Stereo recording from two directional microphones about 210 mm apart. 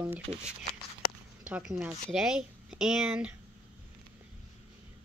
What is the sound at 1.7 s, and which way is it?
Speech, 5° right (ahead or behind).